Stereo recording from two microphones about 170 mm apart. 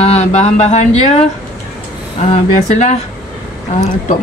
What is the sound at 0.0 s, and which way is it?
Speech, 40° left (ahead or behind).